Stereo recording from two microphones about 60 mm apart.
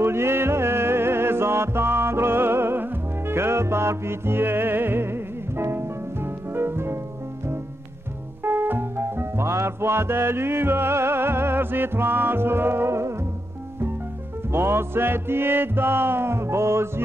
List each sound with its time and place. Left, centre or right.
0.0 s music: right
8.5 s music: right
14.5 s music: right